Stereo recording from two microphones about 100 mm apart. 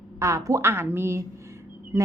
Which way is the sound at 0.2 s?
30° right (ahead or behind).